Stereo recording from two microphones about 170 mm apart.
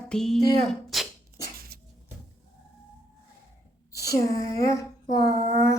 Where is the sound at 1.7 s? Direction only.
70° right (ahead or behind).